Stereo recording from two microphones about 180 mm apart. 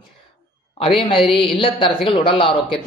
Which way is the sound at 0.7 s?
30° left (ahead or behind).